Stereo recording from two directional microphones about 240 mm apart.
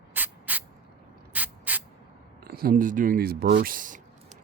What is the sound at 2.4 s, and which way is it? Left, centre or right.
Speech, right.